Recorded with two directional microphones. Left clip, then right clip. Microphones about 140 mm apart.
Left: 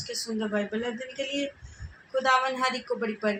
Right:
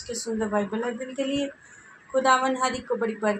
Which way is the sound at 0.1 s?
40° right (ahead or behind).